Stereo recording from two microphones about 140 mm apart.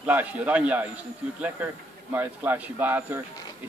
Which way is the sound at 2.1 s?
15° right (ahead or behind).